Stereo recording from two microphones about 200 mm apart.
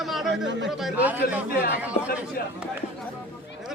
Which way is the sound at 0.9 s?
5° right (ahead or behind).